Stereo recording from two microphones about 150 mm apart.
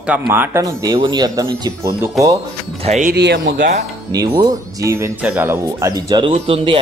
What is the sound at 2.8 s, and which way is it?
Speech, 50° right (ahead or behind).